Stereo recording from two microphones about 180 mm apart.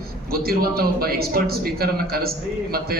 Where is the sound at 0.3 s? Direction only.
55° right (ahead or behind).